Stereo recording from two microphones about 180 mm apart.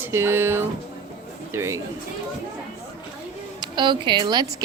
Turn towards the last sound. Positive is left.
turn(degrees=-25)  # may be behind; listen again after turning